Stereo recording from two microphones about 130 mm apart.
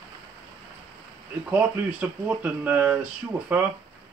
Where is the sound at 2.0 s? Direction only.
15° right (ahead or behind).